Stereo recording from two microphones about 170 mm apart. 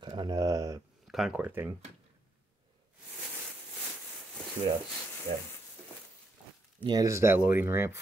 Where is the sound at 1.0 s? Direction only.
Centre (ahead or behind).